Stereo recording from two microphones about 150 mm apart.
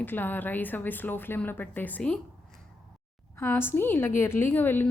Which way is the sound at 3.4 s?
15° left (ahead or behind).